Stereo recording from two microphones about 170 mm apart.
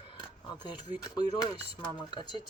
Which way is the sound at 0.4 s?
25° left (ahead or behind).